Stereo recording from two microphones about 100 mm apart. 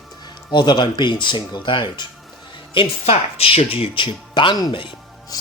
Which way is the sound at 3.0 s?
70° left (ahead or behind).